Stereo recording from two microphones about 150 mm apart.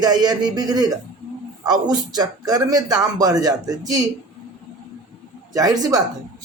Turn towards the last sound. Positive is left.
turn(degrees=-25)  # may be behind; listen again after turning